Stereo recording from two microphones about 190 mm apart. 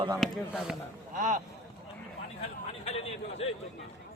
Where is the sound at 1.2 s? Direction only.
40° right (ahead or behind).